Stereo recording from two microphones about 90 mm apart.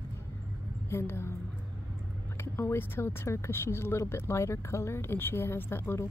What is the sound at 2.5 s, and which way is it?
Speech, 25° left (ahead or behind).